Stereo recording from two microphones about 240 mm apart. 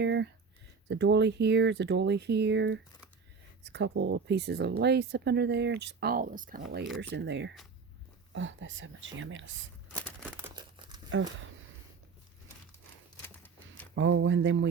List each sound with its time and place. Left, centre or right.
0.0 s a sound: right
0.9 s speech: right
7.1 s speech: right
10.2 s crumpling: centre
11.1 s speech: right
13.2 s a sound: centre
13.9 s speech: right